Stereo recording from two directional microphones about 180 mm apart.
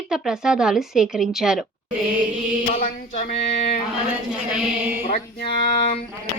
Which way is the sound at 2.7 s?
45° left (ahead or behind).